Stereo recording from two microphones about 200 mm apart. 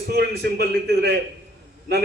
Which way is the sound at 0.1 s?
55° right (ahead or behind).